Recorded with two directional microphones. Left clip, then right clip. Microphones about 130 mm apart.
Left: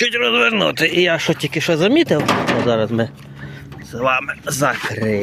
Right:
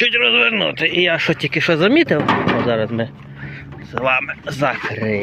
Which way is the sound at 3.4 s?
55° left (ahead or behind).